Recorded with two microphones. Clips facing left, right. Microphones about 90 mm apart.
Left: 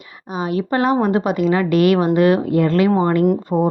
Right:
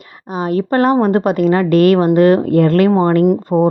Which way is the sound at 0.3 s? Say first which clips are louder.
Right 4 dB; 40° right (ahead or behind).